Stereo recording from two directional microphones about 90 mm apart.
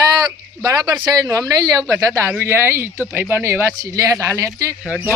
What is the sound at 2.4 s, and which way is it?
Speech, 25° right (ahead or behind).